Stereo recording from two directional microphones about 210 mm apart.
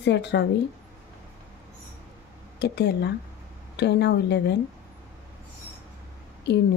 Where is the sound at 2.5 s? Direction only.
55° left (ahead or behind).